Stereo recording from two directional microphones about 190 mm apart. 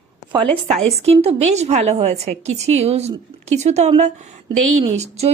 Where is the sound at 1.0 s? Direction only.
30° right (ahead or behind).